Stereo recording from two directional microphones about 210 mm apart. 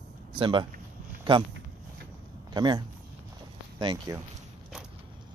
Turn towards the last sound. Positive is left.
turn(degrees=-20)  # may be behind; listen again after turning